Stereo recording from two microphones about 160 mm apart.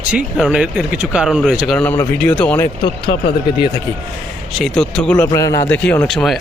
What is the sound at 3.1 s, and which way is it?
Speech, 35° left (ahead or behind).